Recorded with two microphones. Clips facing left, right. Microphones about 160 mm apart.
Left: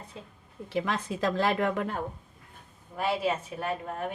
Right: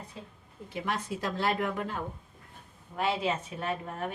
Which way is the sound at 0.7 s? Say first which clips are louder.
Left 3 dB; 90° left.